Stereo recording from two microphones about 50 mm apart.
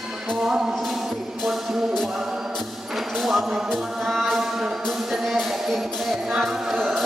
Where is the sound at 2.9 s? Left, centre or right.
Centre.